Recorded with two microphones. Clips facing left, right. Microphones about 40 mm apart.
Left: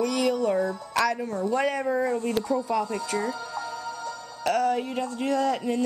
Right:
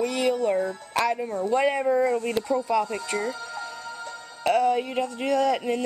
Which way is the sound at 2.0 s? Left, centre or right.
Right.